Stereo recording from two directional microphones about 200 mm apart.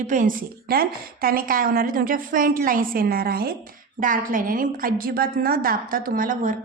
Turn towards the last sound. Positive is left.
turn(degrees=-40)  # may be behind; listen again after turning